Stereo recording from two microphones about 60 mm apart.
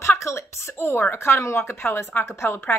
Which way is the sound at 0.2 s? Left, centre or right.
Left.